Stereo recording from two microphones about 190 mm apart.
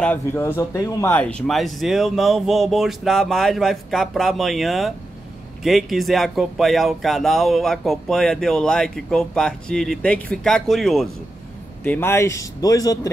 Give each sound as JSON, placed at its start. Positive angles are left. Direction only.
{"t": 0.0, "sound": "speech", "side_deg": 10}